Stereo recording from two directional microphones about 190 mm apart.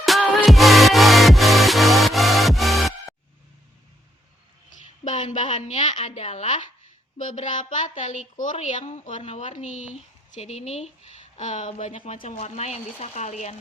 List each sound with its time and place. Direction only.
0.0 s music: centre (ahead or behind)
5.0 s a woman's voice: 40° left (ahead or behind)
12.1 s a woman's voice: 45° left (ahead or behind)